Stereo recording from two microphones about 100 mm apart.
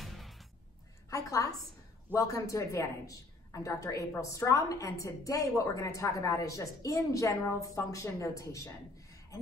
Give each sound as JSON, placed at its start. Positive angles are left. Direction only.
{"t": 0.0, "sound": "music", "side_deg": 0}
{"t": 1.1, "sound": "a sound", "side_deg": 35}
{"t": 2.1, "sound": "a woman's voice", "side_deg": 30}